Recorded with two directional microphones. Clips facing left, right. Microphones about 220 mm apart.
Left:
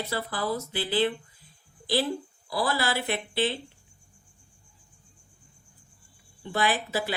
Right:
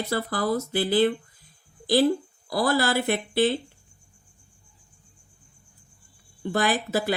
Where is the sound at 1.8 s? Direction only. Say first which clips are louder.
Right 7 dB; 45° right (ahead or behind).